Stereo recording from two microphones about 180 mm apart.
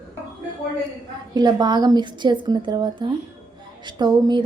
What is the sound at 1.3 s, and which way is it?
A woman's voice, 20° right (ahead or behind).